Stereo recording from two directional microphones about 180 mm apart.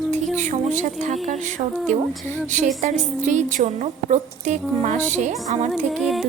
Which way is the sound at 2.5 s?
40° right (ahead or behind).